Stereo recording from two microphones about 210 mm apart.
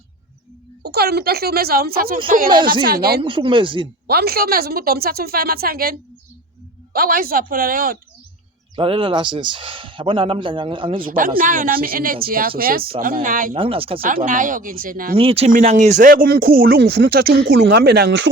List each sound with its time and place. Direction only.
0.8 s speech: 50° right (ahead or behind)
3.2 s speech: 25° right (ahead or behind)
4.0 s speech: 45° right (ahead or behind)
8.7 s speech: 25° right (ahead or behind)
11.0 s speech: 40° right (ahead or behind)
13.6 s speech: 25° right (ahead or behind)
14.0 s speech: 40° right (ahead or behind)
15.1 s speech: 25° right (ahead or behind); by 18.3 s 55° right (ahead or behind)